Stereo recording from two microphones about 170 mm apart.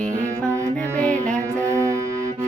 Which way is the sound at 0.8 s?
5° left (ahead or behind).